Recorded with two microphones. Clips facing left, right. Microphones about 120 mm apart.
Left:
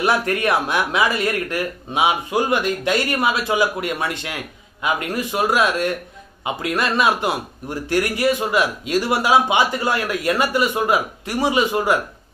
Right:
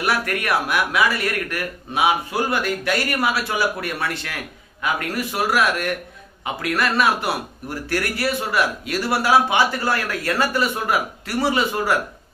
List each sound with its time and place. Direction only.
0.0 s a man's voice: 25° left (ahead or behind)